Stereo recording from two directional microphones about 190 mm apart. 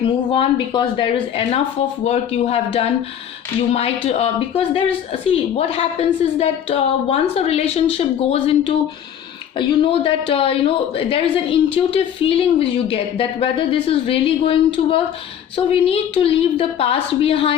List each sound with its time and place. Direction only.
0.0 s a woman's voice: 25° left (ahead or behind)